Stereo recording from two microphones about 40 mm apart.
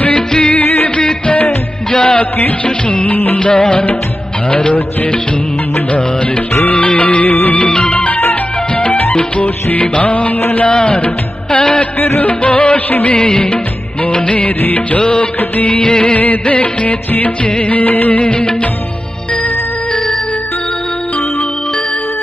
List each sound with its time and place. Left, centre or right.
0.3 s music: left
2.6 s music of bollywood: left
6.7 s music: left
9.7 s music of bollywood: left
10.7 s music: left
11.5 s music of bollywood: left